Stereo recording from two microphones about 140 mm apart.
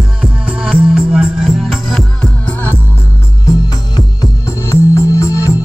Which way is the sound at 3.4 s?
25° left (ahead or behind).